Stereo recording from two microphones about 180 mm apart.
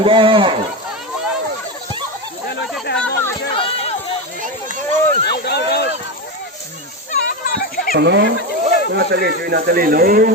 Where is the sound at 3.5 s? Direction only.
30° left (ahead or behind).